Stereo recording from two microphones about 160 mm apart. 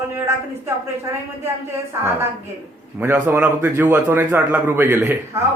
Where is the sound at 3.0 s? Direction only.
15° right (ahead or behind).